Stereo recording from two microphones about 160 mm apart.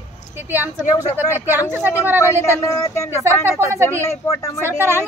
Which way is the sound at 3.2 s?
15° right (ahead or behind).